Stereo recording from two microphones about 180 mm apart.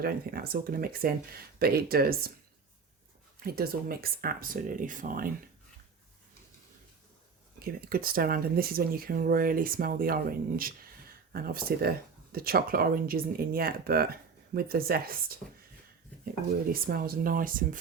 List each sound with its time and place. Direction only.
0.0 s speech: 55° right (ahead or behind)
3.4 s speech: 55° right (ahead or behind)
7.6 s speech: 55° right (ahead or behind)
16.7 s speech: 55° right (ahead or behind)